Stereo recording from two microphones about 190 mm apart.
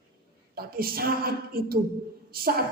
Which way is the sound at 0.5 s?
50° right (ahead or behind).